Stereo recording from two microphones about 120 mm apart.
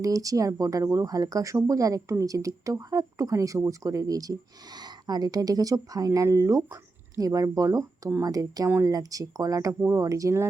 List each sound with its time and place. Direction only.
0.0 s speech: 30° right (ahead or behind)